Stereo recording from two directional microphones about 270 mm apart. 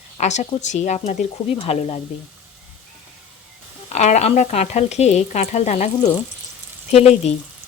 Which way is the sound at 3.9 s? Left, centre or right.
Left.